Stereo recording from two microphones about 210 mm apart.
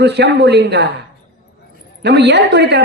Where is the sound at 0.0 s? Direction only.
50° right (ahead or behind).